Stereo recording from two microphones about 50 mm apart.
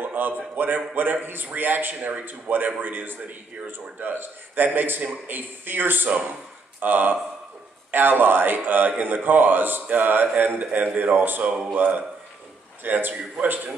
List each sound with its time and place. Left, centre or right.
0.0 s a man's voice: right
6.0 s a man's voice: right